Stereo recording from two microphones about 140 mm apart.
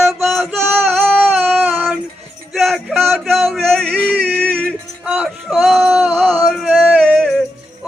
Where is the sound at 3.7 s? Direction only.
10° right (ahead or behind).